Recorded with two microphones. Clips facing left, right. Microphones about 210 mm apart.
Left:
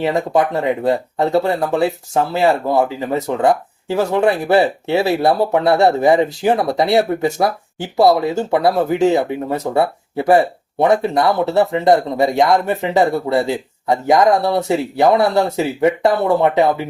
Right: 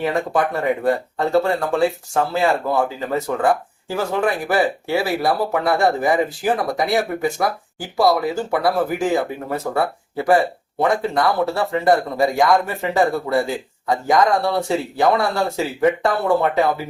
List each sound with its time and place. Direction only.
0.0 s speech: 20° left (ahead or behind)